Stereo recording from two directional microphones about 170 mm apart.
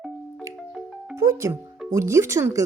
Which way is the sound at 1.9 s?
15° right (ahead or behind).